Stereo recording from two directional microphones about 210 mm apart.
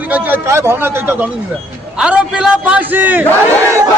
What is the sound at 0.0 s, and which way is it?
A man's voice, 10° right (ahead or behind).